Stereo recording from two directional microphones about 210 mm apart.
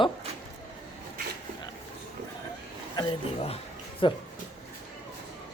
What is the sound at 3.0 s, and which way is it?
A woman's voice, 25° left (ahead or behind).